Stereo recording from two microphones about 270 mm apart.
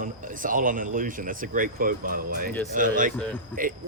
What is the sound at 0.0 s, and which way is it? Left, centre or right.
Speech, right.